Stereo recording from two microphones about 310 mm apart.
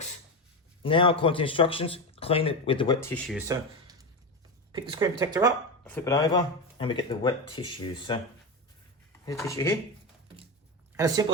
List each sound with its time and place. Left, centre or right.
0.8 s a man's voice: centre
3.3 s speech: centre
5.8 s speech: centre
9.2 s speech: centre
10.9 s speech: centre